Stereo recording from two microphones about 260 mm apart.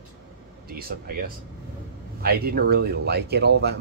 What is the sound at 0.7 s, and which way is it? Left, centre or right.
Speech, right.